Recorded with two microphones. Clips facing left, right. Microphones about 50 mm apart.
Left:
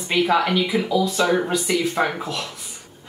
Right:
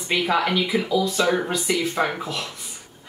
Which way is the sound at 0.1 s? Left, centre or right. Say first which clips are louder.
Left 2 dB; centre.